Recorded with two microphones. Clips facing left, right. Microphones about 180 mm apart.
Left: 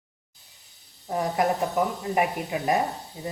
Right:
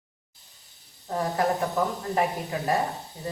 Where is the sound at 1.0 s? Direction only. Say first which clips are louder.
Left 1 dB; 15° left (ahead or behind).